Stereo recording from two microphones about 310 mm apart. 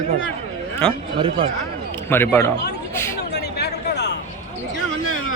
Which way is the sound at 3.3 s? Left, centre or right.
Left.